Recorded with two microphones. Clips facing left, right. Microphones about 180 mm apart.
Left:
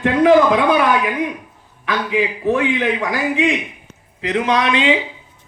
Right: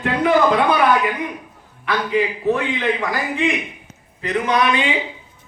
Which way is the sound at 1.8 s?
90° left.